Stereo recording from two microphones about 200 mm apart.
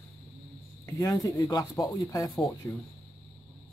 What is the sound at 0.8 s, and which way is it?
Speech, 15° left (ahead or behind).